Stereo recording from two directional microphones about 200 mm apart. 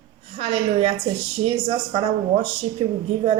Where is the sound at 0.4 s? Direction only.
25° right (ahead or behind).